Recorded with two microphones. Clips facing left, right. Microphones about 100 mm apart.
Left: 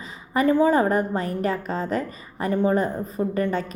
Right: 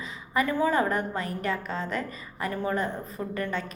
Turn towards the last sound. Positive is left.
turn(degrees=30)  # may be behind; listen again after turning